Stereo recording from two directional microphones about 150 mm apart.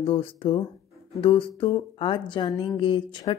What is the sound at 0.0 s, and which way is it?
Speech, 35° left (ahead or behind).